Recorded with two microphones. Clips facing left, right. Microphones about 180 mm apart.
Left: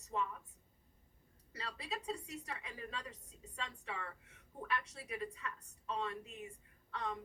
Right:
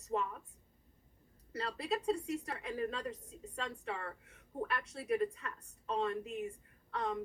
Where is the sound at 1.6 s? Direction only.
50° right (ahead or behind).